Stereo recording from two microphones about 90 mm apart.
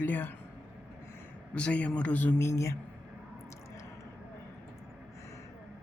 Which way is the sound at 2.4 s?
30° left (ahead or behind).